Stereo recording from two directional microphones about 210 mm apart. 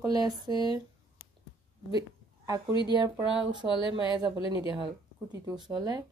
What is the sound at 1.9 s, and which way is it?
A woman's voice, 20° right (ahead or behind).